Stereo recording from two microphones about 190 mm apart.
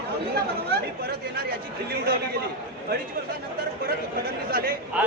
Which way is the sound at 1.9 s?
55° right (ahead or behind).